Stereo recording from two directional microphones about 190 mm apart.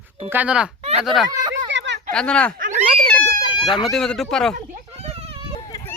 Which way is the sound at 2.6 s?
40° right (ahead or behind).